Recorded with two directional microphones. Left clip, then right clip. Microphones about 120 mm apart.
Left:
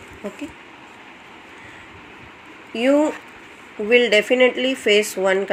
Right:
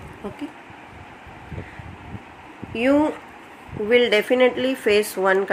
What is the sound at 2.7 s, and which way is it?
Speech, 20° left (ahead or behind).